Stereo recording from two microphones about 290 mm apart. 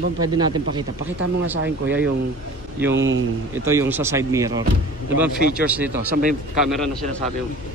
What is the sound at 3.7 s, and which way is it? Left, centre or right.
Speech, centre.